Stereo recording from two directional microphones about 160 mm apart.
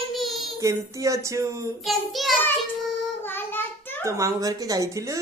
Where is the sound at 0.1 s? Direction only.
Centre (ahead or behind).